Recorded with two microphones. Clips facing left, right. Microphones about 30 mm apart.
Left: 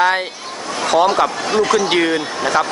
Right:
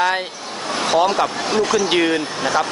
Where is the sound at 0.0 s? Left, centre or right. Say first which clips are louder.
Left 3 dB; centre.